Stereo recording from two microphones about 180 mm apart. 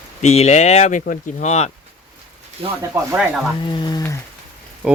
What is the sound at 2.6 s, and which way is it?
Speech, 30° right (ahead or behind).